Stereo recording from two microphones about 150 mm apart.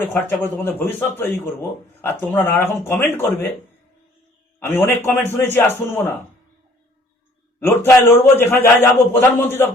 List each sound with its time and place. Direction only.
0.0 s a man's voice: 10° left (ahead or behind)
4.6 s a man's voice: 15° left (ahead or behind)
7.6 s a man's voice: 15° left (ahead or behind)